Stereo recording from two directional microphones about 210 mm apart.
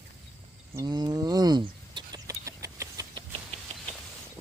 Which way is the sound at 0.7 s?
20° right (ahead or behind).